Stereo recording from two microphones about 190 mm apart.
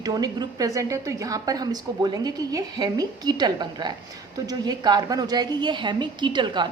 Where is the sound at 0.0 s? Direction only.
20° right (ahead or behind).